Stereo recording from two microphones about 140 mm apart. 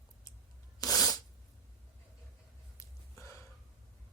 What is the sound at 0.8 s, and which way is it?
Sneeze, 25° left (ahead or behind).